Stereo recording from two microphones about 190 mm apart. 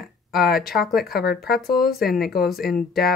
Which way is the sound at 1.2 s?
55° left (ahead or behind).